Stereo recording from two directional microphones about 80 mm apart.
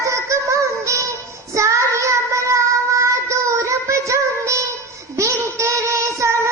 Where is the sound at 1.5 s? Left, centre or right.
Right.